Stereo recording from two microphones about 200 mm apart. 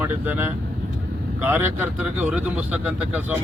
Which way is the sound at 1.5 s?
10° right (ahead or behind).